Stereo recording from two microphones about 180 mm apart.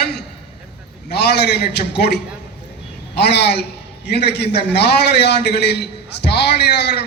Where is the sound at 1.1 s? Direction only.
65° left (ahead or behind).